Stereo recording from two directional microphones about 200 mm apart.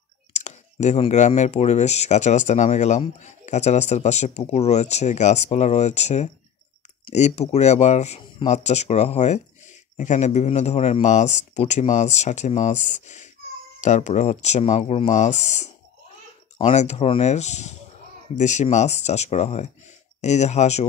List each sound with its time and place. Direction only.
0.3 s speech: 35° left (ahead or behind)
16.7 s speech: 35° left (ahead or behind)